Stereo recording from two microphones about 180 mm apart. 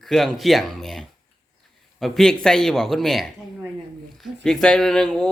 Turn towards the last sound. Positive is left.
turn(degrees=5)  # may be behind; listen again after turning